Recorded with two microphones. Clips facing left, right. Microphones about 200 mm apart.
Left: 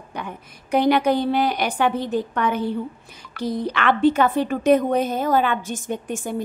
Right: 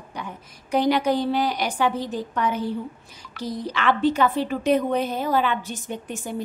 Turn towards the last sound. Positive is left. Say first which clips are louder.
# left 4 dB
turn(degrees=50)  # may be behind; listen again after turning